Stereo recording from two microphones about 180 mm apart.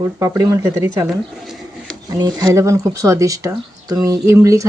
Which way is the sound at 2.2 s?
20° right (ahead or behind).